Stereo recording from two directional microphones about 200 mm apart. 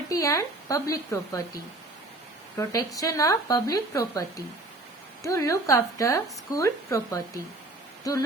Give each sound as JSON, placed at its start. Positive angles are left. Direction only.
{"t": 0.1, "sound": "a woman's voice", "side_deg": 15}
{"t": 2.6, "sound": "a woman's voice", "side_deg": 15}